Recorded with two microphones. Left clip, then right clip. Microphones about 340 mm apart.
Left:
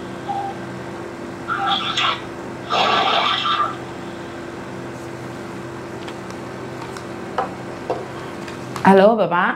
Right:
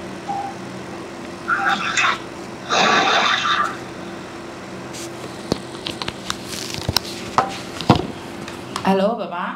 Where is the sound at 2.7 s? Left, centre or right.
Right.